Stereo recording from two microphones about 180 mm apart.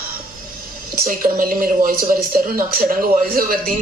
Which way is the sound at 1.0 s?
50° right (ahead or behind).